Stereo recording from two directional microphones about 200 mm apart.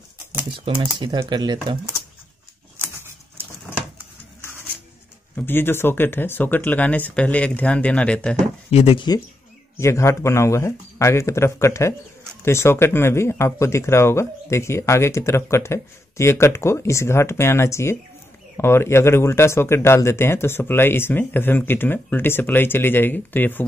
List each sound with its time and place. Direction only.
0.7 s speech: 20° right (ahead or behind)
2.8 s a sound: 10° right (ahead or behind)
5.3 s speech: 10° left (ahead or behind)
8.6 s speech: 30° left (ahead or behind); by 23.6 s 10° left (ahead or behind)